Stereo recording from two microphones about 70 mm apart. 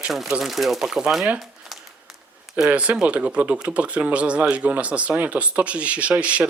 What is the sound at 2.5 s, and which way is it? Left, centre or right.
Speech, centre.